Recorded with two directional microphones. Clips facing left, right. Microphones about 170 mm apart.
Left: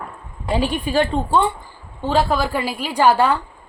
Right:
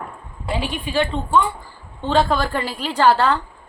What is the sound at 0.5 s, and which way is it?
Speech, 40° left (ahead or behind).